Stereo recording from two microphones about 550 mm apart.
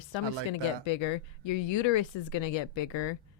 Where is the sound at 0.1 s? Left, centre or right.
Left.